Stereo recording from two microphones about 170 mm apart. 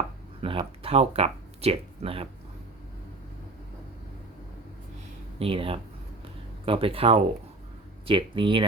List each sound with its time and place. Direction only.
0.4 s speech: 30° right (ahead or behind)
5.4 s speech: 35° right (ahead or behind)